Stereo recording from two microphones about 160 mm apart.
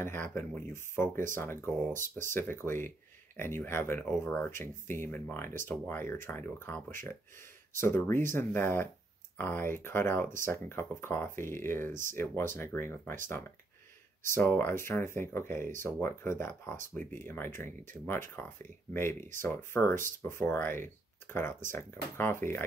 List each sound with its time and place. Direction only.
0.0 s speech: 15° left (ahead or behind)
11.9 s speech: 55° right (ahead or behind)
12.2 s speech: 15° left (ahead or behind)
14.3 s speech: 15° left (ahead or behind)